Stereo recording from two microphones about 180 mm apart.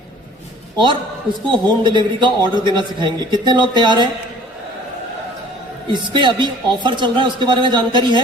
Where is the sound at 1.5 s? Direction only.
25° right (ahead or behind).